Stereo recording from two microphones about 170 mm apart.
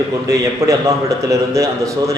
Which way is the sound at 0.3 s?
20° right (ahead or behind).